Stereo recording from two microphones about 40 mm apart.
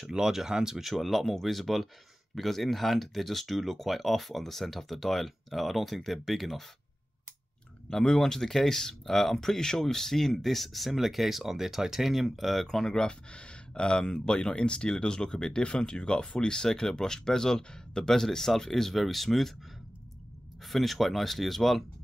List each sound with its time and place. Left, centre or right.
0.1 s speech: centre
7.9 s speech: centre
13.0 s speech: left; by 19.5 s centre
20.6 s speech: centre